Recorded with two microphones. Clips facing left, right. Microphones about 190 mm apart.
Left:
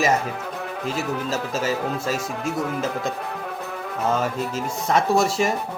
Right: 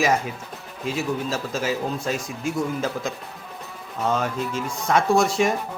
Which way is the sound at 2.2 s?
70° left (ahead or behind).